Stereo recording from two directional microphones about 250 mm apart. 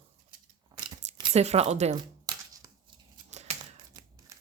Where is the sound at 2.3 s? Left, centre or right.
Centre.